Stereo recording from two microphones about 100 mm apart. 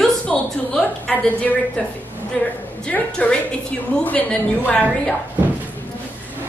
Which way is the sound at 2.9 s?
10° left (ahead or behind).